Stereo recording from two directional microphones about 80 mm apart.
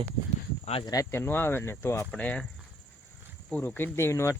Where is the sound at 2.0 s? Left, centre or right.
Centre.